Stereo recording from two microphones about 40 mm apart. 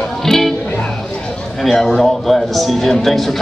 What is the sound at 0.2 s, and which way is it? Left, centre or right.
Music, centre.